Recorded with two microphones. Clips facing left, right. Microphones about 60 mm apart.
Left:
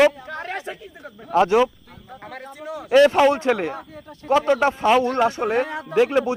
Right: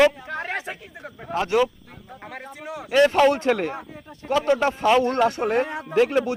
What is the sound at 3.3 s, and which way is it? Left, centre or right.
Speech, left.